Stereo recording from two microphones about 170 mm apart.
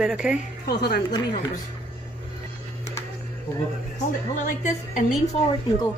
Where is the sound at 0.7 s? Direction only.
70° left (ahead or behind).